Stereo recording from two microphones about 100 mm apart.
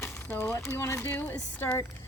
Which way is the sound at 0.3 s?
20° left (ahead or behind).